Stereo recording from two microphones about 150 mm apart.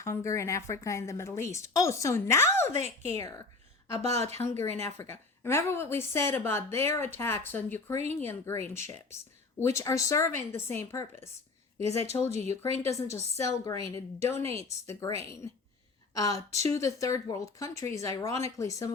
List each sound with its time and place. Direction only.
0.0 s a woman's voice: 20° left (ahead or behind)
2.7 s a woman's voice: 45° right (ahead or behind)
3.2 s a woman's voice: 20° left (ahead or behind)
4.0 s a woman's voice: 45° right (ahead or behind)
4.4 s a woman's voice: 15° left (ahead or behind)
12.4 s a woman's voice: 45° right (ahead or behind)
12.8 s a woman's voice: 20° left (ahead or behind)